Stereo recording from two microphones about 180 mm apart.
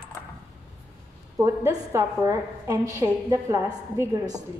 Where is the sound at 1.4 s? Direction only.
15° right (ahead or behind).